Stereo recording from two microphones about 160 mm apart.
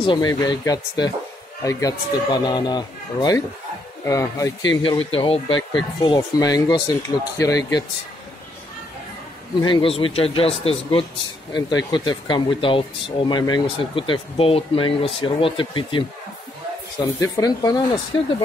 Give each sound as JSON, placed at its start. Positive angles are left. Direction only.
{"t": 0.0, "sound": "speech", "side_deg": 30}
{"t": 9.6, "sound": "speech", "side_deg": 30}
{"t": 17.0, "sound": "speech", "side_deg": 20}